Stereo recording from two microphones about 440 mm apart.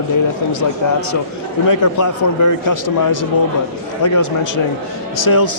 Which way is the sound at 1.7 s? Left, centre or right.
Left.